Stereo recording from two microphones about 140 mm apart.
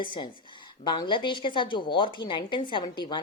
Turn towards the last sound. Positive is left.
turn(degrees=35)  # may be behind; listen again after turning